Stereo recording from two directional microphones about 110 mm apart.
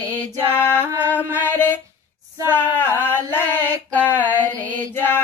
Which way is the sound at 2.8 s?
15° left (ahead or behind).